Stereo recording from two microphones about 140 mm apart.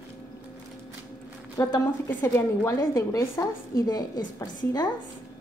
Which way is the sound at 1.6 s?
30° left (ahead or behind).